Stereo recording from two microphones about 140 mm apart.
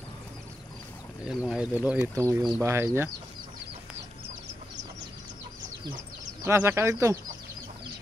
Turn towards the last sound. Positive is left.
turn(degrees=-20)  # may be behind; listen again after turning